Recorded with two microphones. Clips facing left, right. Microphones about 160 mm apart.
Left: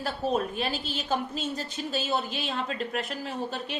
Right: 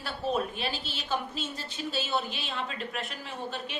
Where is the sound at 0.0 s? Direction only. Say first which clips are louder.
Left 3 dB; 45° left (ahead or behind).